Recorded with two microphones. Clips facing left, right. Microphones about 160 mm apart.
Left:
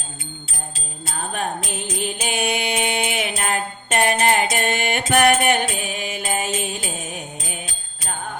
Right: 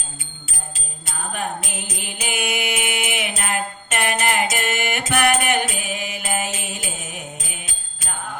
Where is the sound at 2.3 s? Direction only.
30° left (ahead or behind).